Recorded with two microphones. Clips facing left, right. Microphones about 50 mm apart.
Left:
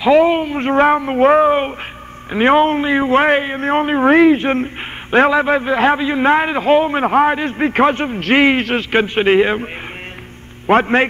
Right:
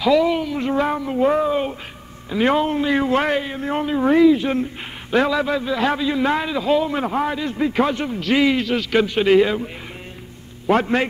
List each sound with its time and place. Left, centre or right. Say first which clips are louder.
0.0 s a man's voice: left 5 dB; left
2.9 s a man's voice: left 5 dB; left
10.7 s a man's voice: left 5 dB; left